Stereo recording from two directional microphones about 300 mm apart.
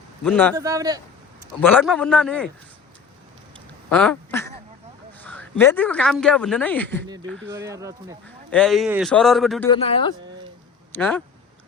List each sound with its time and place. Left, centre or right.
0.3 s speech: centre
0.5 s speech: centre
1.6 s speech: centre
3.8 s quack: centre
5.2 s speech: centre
7.4 s speech: centre
8.4 s speech: centre
9.6 s speech: centre
10.9 s speech: centre